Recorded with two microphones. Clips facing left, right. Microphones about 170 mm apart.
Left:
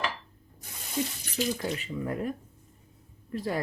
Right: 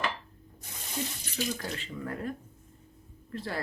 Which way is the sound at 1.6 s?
10° left (ahead or behind).